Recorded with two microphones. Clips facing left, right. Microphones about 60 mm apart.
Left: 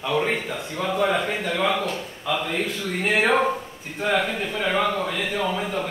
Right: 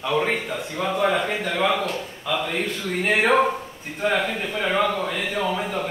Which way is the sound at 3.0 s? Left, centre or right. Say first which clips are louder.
Right 1 dB; centre.